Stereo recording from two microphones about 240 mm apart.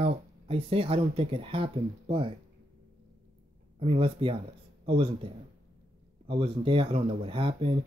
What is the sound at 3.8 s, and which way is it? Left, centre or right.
Speech, right.